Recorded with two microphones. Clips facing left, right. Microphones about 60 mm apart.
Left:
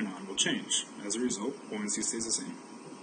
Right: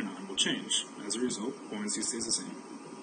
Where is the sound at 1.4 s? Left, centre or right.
Left.